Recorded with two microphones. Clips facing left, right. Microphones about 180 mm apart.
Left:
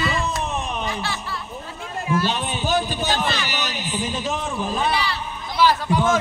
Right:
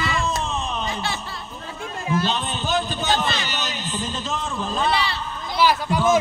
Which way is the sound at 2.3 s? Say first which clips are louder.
Left 1 dB; 10° left (ahead or behind).